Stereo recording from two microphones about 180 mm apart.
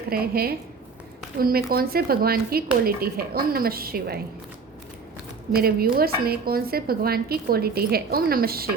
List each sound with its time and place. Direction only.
0.1 s speech: 55° right (ahead or behind)
5.5 s speech: 55° right (ahead or behind)